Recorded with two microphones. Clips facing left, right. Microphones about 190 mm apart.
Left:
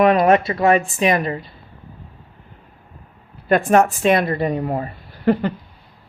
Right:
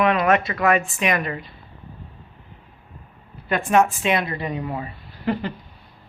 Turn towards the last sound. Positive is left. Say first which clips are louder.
# left 7 dB
turn(degrees=45)  # may be behind; listen again after turning